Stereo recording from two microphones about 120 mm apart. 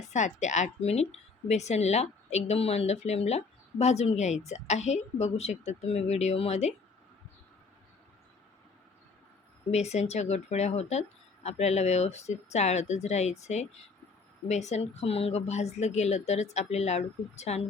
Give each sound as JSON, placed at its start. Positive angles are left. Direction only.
{"t": 0.1, "sound": "a woman's voice", "side_deg": 80}
{"t": 9.7, "sound": "speech", "side_deg": 65}